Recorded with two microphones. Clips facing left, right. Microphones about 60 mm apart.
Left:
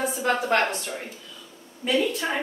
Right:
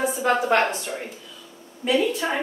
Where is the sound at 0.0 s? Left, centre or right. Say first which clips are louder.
Right 3 dB; centre.